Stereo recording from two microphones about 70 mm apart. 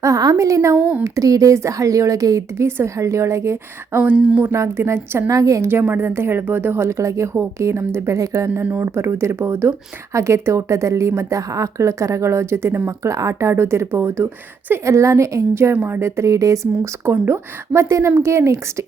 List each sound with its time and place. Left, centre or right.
0.0 s speech: right
2.6 s speech: right
4.1 s speech: centre
4.4 s a woman's voice: right
5.3 s speech: right
5.6 s a woman's voice: right
13.1 s a woman's voice: right
15.7 s a woman's voice: right